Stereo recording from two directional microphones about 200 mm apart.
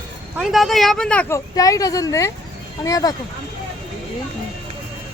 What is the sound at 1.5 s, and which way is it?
A woman's voice, 15° left (ahead or behind).